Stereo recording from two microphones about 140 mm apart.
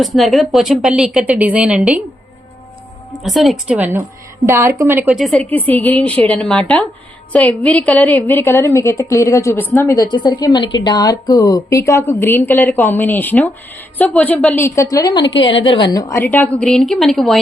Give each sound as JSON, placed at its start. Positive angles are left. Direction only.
{"t": 0.0, "sound": "a woman's voice", "side_deg": 0}
{"t": 3.1, "sound": "a woman's voice", "side_deg": 0}
{"t": 3.8, "sound": "a woman's voice", "side_deg": -15}
{"t": 5.0, "sound": "a woman's voice", "side_deg": 0}
{"t": 5.5, "sound": "a woman's voice", "side_deg": 10}